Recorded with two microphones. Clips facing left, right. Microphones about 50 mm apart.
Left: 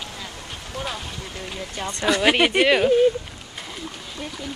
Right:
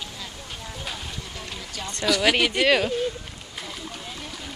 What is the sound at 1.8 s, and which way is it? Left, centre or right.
Speech, left.